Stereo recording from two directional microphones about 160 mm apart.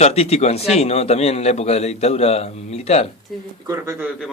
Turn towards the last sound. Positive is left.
turn(degrees=-20)  # may be behind; listen again after turning